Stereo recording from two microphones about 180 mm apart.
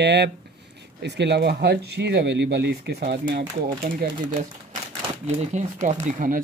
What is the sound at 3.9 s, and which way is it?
Speech, 50° right (ahead or behind).